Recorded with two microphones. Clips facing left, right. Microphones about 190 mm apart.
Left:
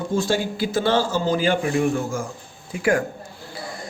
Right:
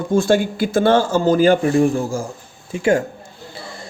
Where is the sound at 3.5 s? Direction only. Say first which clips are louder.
Left 2 dB; 25° right (ahead or behind).